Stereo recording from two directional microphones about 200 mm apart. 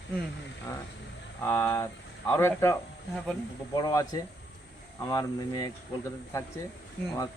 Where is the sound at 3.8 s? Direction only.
15° left (ahead or behind).